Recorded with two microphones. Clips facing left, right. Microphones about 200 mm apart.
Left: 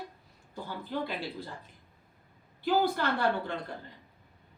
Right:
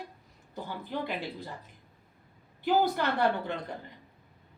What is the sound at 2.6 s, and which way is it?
Speech, 20° right (ahead or behind).